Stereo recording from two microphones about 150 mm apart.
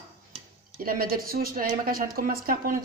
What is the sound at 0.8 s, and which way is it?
Speech, 80° right.